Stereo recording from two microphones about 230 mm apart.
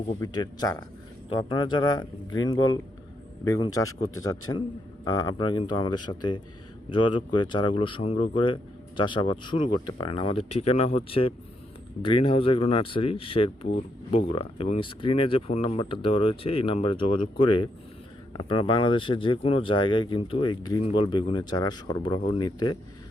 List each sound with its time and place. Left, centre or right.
0.1 s speech: centre